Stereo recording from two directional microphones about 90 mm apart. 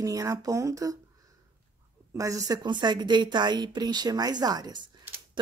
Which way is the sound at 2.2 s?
40° right (ahead or behind).